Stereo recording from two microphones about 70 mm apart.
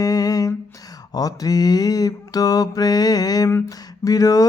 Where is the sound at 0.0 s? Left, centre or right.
Left.